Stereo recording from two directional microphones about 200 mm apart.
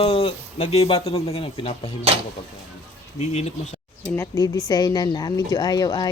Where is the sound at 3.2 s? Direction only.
35° left (ahead or behind).